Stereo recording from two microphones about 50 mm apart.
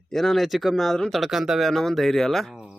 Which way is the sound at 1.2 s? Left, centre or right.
Centre.